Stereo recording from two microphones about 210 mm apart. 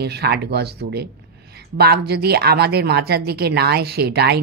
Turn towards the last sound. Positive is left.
turn(degrees=-50)  # may be behind; listen again after turning